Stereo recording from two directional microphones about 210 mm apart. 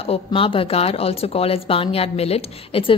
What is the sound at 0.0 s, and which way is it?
Speech, 25° left (ahead or behind).